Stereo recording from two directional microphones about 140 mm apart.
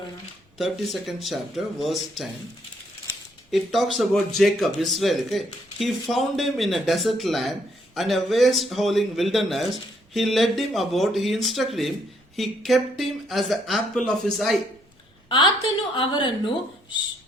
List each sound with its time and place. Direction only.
0.6 s speech: centre (ahead or behind)
3.5 s speech: centre (ahead or behind)
16.0 s a woman's voice: 35° left (ahead or behind)